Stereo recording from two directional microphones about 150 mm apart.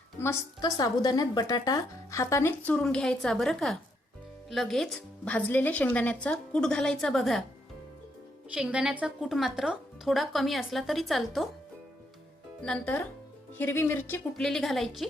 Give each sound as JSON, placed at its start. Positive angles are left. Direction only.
{"t": 0.2, "sound": "a woman's voice", "side_deg": 20}
{"t": 8.5, "sound": "a woman's voice", "side_deg": -5}
{"t": 12.6, "sound": "a woman's voice", "side_deg": 5}
{"t": 14.3, "sound": "a woman's voice", "side_deg": 5}